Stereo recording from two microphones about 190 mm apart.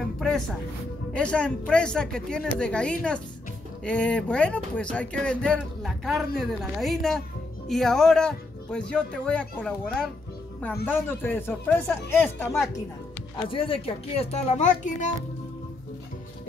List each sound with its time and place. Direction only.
1.1 s speech: 5° left (ahead or behind)
13.4 s a child's voice: 25° left (ahead or behind)